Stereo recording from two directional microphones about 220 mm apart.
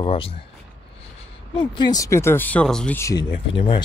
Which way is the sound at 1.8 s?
15° left (ahead or behind).